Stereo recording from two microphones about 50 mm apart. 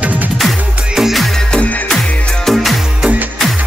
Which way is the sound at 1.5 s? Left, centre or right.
Left.